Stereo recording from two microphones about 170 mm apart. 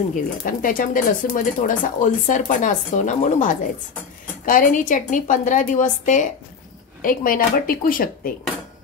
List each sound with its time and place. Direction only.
0.1 s speech: 55° left (ahead or behind)